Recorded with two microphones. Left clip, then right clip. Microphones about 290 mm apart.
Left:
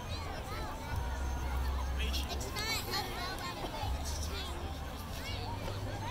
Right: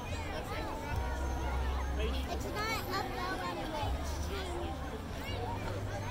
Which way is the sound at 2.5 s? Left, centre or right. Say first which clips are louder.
Right 1 dB; right.